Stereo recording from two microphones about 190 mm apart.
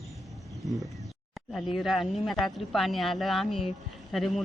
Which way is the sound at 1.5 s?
Centre (ahead or behind).